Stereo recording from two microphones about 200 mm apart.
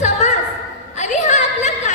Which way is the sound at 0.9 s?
35° left (ahead or behind).